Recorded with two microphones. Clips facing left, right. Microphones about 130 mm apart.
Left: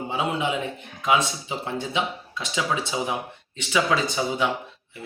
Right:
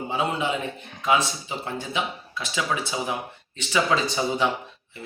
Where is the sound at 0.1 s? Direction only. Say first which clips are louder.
Even; 15° left (ahead or behind).